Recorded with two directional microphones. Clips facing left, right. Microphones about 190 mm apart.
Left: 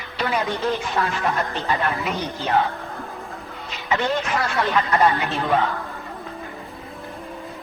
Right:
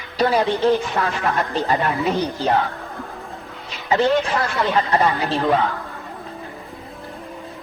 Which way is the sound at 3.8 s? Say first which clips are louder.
Right 5 dB; 35° right (ahead or behind).